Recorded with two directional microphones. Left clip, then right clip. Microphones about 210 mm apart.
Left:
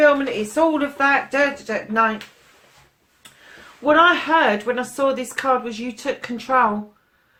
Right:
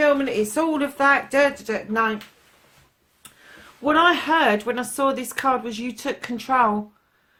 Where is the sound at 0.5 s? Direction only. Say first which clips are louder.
Left 4 dB; 45° right (ahead or behind).